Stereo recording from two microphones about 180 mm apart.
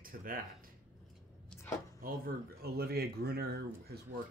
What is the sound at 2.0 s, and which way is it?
Speech, 55° right (ahead or behind).